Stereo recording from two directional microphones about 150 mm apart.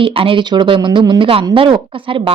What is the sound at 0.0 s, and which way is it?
A woman's voice, 35° right (ahead or behind).